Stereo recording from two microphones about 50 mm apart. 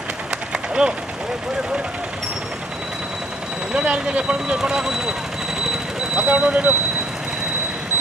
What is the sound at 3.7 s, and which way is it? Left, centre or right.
Speech, right.